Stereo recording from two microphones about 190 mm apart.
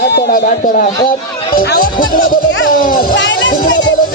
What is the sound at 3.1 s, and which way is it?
Music, 75° left (ahead or behind).